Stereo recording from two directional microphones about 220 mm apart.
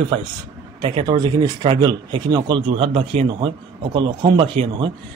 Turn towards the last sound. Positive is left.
turn(degrees=-25)  # may be behind; listen again after turning